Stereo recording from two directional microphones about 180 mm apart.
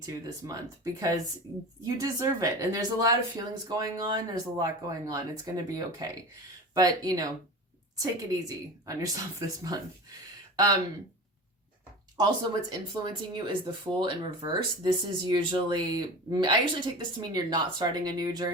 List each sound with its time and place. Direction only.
0.0 s speech: 20° right (ahead or behind)
12.1 s speech: 25° right (ahead or behind)